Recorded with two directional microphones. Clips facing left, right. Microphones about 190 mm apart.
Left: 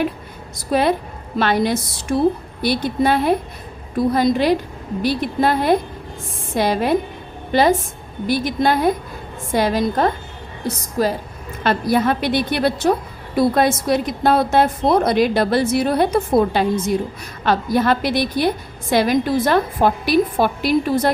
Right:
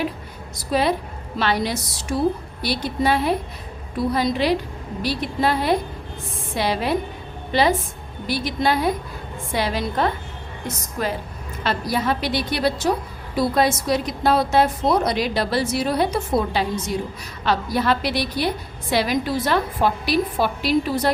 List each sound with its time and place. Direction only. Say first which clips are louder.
0.7 s a woman's voice: left 3 dB; 50° left (ahead or behind); by 11.1 s 35° left (ahead or behind)
11.6 s a woman's voice: left 6 dB; 55° left (ahead or behind)